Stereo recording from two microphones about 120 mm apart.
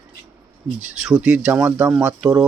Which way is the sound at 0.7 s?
10° right (ahead or behind).